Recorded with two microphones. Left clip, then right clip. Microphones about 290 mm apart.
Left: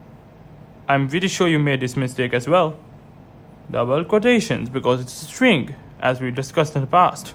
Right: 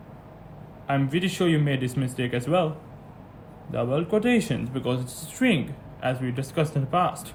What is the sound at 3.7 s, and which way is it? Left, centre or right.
A man's voice, centre.